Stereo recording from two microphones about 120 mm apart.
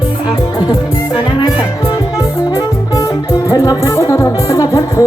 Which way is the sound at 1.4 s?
35° left (ahead or behind).